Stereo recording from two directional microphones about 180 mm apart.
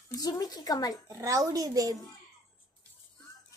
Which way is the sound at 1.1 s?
20° right (ahead or behind).